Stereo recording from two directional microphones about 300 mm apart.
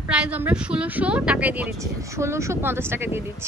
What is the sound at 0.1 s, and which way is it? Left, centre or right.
A woman's voice, centre.